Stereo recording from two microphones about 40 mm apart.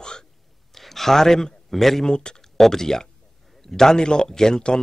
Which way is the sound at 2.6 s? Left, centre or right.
Centre.